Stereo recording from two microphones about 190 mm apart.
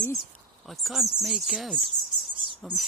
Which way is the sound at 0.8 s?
Centre (ahead or behind).